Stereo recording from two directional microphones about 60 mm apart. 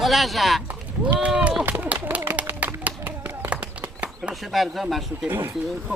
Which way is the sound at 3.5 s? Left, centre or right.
Right.